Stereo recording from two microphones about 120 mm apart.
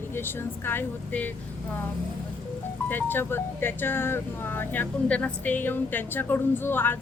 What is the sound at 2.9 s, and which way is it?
Speech, 15° left (ahead or behind).